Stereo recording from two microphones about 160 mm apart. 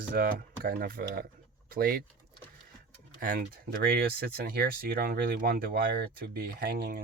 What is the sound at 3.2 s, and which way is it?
Speech, 65° right (ahead or behind).